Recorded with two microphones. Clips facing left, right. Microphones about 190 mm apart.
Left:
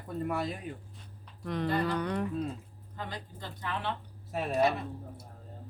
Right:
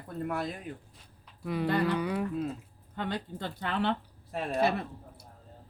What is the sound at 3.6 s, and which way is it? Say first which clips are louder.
Speech: right 5 dB; 70° right (ahead or behind).